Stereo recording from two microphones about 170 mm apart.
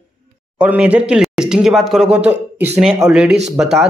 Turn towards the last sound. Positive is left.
turn(degrees=0)  # may be behind; listen again after turning